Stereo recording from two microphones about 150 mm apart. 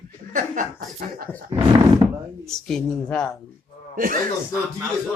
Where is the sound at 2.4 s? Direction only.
5° left (ahead or behind).